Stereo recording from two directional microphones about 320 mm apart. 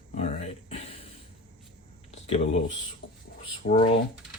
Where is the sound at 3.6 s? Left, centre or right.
Left.